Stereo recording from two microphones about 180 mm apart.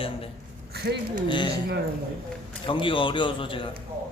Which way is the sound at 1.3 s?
25° left (ahead or behind).